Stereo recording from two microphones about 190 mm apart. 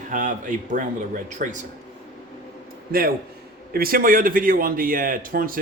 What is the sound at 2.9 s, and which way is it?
Speech, 50° right (ahead or behind).